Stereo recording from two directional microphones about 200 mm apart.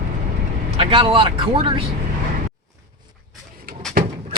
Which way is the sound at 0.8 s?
25° right (ahead or behind).